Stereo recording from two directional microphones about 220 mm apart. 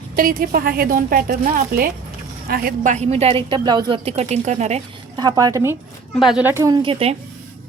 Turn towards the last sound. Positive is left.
turn(degrees=-25)  # may be behind; listen again after turning